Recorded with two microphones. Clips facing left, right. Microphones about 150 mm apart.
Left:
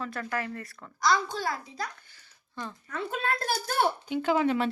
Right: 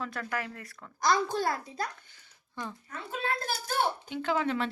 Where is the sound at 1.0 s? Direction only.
50° right (ahead or behind).